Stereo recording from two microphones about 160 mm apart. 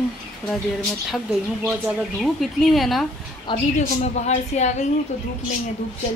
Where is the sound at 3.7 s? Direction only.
45° left (ahead or behind).